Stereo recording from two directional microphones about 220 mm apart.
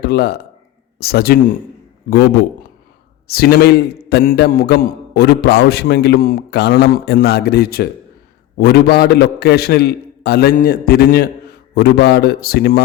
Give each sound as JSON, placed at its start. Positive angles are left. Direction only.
{"t": 0.0, "sound": "a man's voice", "side_deg": 45}